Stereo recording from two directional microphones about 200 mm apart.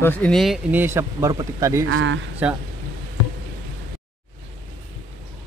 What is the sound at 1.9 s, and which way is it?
Speech, 80° right.